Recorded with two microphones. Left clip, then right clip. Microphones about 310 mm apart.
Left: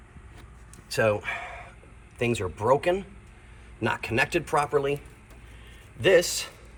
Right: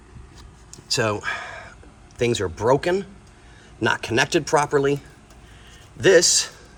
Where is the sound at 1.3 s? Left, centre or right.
Centre.